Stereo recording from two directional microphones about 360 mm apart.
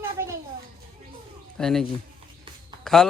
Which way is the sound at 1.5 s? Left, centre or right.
Centre.